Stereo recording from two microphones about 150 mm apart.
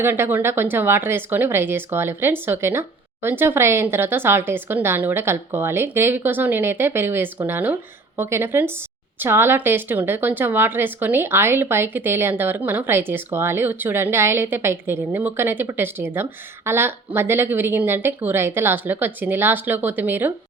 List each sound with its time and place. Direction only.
0.0 s a woman's voice: 15° right (ahead or behind)